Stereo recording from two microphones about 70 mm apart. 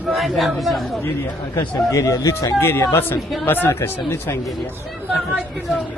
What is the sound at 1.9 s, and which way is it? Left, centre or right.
Speech, left.